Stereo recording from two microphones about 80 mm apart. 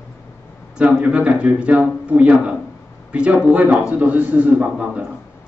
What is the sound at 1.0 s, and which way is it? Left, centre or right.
A man's voice, centre.